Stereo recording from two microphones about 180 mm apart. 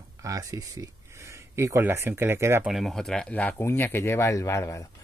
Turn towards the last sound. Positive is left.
turn(degrees=15)  # may be behind; listen again after turning